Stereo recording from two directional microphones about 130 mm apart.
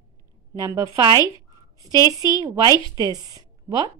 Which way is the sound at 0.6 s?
25° right (ahead or behind).